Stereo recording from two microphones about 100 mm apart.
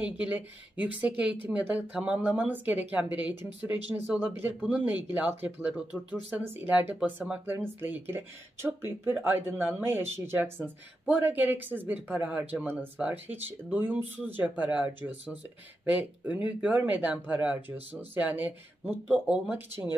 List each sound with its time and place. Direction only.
0.0 s speech: 15° right (ahead or behind)